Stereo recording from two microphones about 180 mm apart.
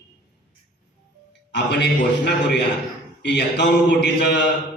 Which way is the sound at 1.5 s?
75° left (ahead or behind).